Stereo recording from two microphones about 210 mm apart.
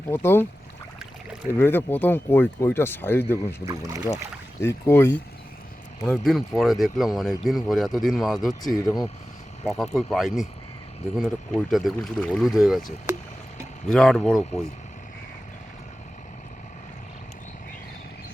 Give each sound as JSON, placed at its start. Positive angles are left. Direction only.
{"t": 0.1, "sound": "speech", "side_deg": 10}
{"t": 1.5, "sound": "speech", "side_deg": 10}
{"t": 3.3, "sound": "speech", "side_deg": -15}
{"t": 4.6, "sound": "speech", "side_deg": 10}
{"t": 6.1, "sound": "speech", "side_deg": 0}
{"t": 8.7, "sound": "speech", "side_deg": 15}
{"t": 9.7, "sound": "speech", "side_deg": 0}
{"t": 13.8, "sound": "speech", "side_deg": 0}